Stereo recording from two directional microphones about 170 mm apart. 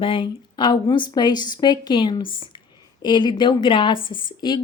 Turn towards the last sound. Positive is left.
turn(degrees=25)  # may be behind; listen again after turning